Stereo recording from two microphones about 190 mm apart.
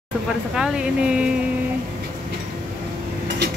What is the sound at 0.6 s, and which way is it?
Speech, 5° right (ahead or behind).